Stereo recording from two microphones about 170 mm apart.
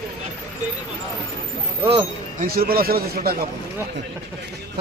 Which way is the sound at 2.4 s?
60° right (ahead or behind).